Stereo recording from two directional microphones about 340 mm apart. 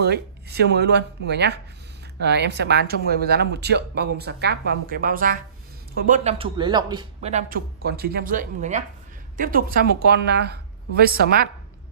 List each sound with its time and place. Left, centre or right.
0.0 s speech: right